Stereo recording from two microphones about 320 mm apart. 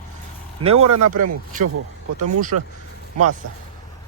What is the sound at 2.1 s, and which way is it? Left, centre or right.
Speech, right.